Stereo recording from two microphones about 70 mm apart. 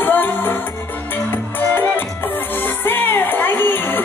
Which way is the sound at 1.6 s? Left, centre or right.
Left.